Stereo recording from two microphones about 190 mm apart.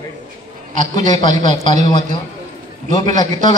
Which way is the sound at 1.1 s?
20° left (ahead or behind).